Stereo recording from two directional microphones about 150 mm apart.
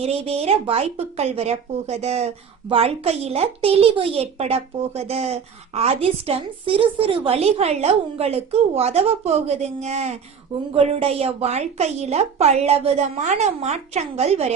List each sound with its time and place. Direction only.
0.0 s speech: 45° right (ahead or behind)